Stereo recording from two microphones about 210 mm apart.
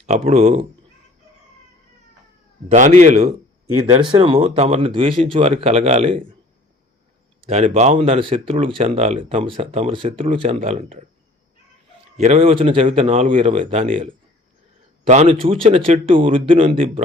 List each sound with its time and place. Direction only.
0.3 s speech: 30° right (ahead or behind)
2.6 s a man's voice: 35° right (ahead or behind)
4.0 s speech: 25° right (ahead or behind)
7.4 s speech: 30° right (ahead or behind)
12.1 s speech: 30° right (ahead or behind)